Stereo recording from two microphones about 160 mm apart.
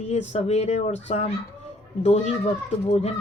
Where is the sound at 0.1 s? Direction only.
40° left (ahead or behind).